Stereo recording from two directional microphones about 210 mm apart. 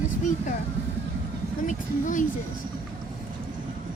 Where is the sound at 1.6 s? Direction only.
35° left (ahead or behind).